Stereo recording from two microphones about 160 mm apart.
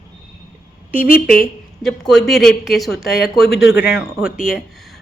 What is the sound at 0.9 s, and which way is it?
Speech, 60° left (ahead or behind).